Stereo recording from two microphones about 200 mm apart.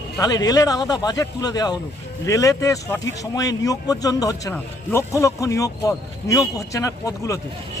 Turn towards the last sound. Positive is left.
turn(degrees=15)  # may be behind; listen again after turning